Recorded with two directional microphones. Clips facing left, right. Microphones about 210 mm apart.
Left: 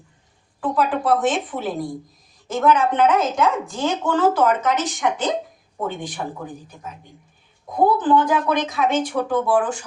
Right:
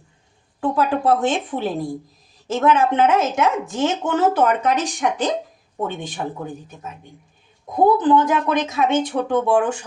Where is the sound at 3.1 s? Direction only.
25° right (ahead or behind).